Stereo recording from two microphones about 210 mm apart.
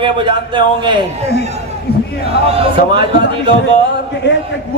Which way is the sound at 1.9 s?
45° left (ahead or behind).